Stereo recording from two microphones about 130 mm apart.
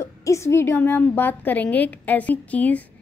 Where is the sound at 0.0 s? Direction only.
25° left (ahead or behind).